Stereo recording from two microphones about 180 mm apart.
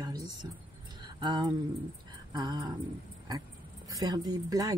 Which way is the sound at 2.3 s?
25° right (ahead or behind).